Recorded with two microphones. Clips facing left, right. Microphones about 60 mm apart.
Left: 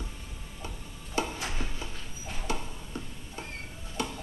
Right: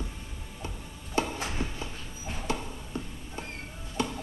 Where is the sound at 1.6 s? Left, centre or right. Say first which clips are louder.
Right 3 dB; right.